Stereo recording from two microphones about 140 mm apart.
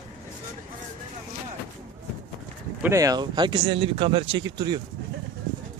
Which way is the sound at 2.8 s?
20° right (ahead or behind).